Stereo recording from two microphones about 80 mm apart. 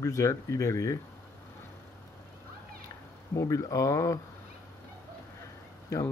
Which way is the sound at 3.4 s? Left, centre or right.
Left.